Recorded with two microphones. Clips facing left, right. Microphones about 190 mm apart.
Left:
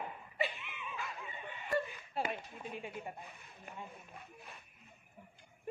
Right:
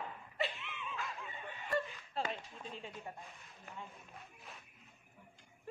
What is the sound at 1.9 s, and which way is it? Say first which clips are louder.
Speech: left 2 dB; 10° left (ahead or behind).